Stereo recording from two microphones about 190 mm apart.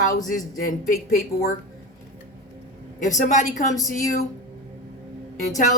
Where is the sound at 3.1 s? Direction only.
40° left (ahead or behind).